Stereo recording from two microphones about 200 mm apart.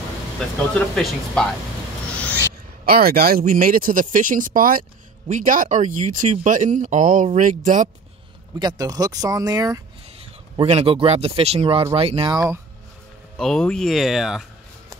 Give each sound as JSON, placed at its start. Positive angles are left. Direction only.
{"t": 0.7, "sound": "speech", "side_deg": 5}
{"t": 2.8, "sound": "speech", "side_deg": -50}
{"t": 8.5, "sound": "speech", "side_deg": -20}
{"t": 10.5, "sound": "speech", "side_deg": -30}
{"t": 13.4, "sound": "speech", "side_deg": 5}